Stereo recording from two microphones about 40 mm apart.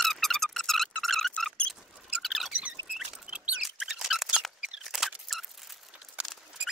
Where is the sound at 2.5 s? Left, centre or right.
Right.